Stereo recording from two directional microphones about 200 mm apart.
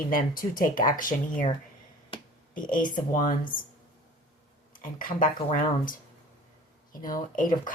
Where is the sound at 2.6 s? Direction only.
45° left (ahead or behind).